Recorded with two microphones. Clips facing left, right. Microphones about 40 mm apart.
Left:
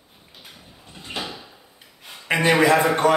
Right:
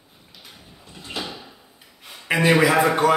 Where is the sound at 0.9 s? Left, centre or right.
Centre.